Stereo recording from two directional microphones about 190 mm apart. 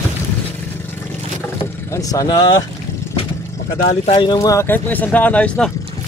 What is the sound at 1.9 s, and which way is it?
Speech, 20° left (ahead or behind).